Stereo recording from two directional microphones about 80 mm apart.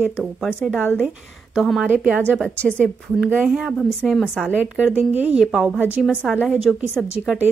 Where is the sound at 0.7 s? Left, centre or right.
Left.